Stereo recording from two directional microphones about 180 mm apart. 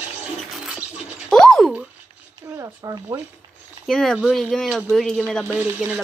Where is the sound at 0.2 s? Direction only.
5° right (ahead or behind).